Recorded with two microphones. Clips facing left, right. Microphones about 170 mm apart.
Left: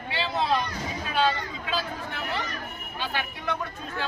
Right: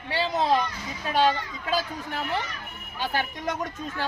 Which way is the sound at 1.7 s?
40° right (ahead or behind).